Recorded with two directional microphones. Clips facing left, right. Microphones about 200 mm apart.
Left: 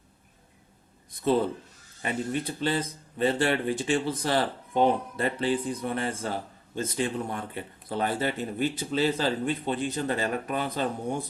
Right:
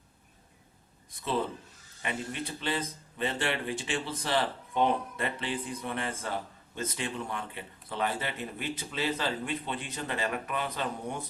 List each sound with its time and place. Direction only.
2.0 s speech: 40° left (ahead or behind)